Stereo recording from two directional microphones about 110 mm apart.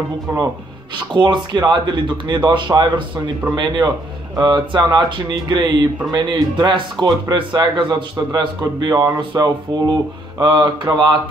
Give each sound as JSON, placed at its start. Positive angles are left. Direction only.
{"t": 0.9, "sound": "a man's voice", "side_deg": -45}